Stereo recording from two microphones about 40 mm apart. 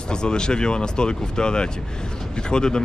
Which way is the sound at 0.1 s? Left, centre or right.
Left.